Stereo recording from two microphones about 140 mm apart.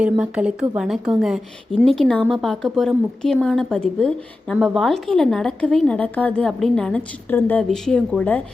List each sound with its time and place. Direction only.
0.0 s a woman's voice: 10° right (ahead or behind)